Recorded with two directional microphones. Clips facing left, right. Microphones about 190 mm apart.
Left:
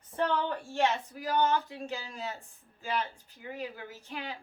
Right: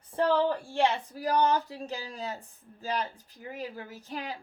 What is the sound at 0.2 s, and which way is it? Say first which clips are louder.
Speech: right 5 dB; 30° right (ahead or behind).